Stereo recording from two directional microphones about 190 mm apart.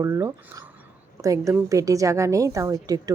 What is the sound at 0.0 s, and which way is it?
Speech, 15° right (ahead or behind).